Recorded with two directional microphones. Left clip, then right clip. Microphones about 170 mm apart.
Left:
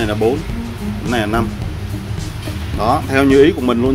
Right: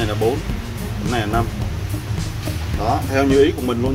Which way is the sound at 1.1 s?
35° left (ahead or behind).